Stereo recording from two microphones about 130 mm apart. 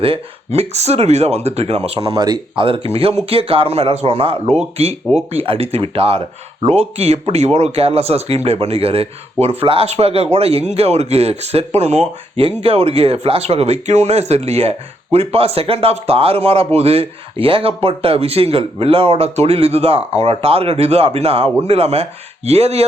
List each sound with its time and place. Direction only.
0.0 s speech: 50° right (ahead or behind)
2.1 s speech: 35° right (ahead or behind); by 22.9 s 55° right (ahead or behind)